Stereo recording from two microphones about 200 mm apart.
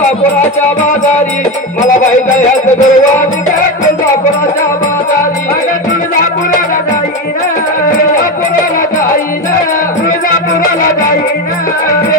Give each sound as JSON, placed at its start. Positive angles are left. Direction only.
{"t": 1.8, "sound": "music", "side_deg": 40}